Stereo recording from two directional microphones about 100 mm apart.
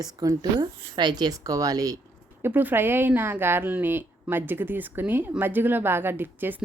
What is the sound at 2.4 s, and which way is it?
A woman's voice, 20° right (ahead or behind).